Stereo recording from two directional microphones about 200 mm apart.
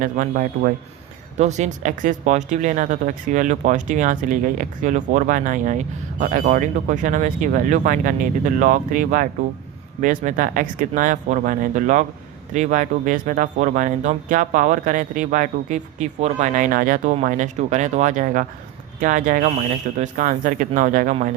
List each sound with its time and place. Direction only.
0.0 s speech: 45° right (ahead or behind)